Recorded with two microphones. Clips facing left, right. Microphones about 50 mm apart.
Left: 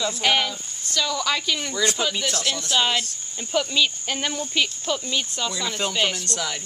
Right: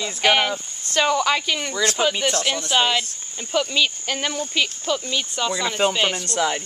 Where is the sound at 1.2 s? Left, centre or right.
Centre.